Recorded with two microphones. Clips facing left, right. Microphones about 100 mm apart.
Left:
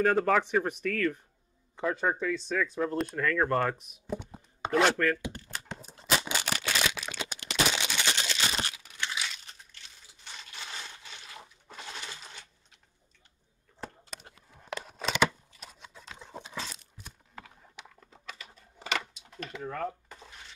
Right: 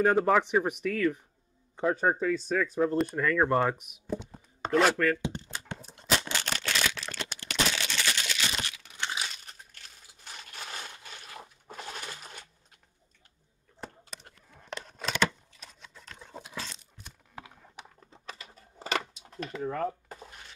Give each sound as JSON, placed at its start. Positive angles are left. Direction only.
{"t": 0.0, "sound": "speech", "side_deg": -15}
{"t": 2.0, "sound": "speech", "side_deg": -35}
{"t": 2.9, "sound": "speech", "side_deg": 0}
{"t": 3.2, "sound": "speech", "side_deg": -15}
{"t": 4.3, "sound": "chopping", "side_deg": 5}
{"t": 4.8, "sound": "speech", "side_deg": 0}
{"t": 5.5, "sound": "a sound", "side_deg": 0}
{"t": 9.0, "sound": "a sound", "side_deg": -40}
{"t": 13.8, "sound": "a sound", "side_deg": 5}
{"t": 18.2, "sound": "typing", "side_deg": -35}
{"t": 19.6, "sound": "speech", "side_deg": -5}